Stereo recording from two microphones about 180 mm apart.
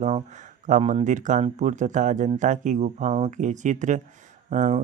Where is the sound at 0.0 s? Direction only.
40° right (ahead or behind).